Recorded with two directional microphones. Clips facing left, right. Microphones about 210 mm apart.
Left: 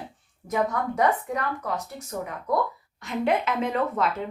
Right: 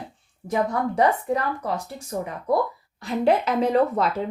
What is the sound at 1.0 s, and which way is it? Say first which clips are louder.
Speech: right 3 dB; 30° right (ahead or behind).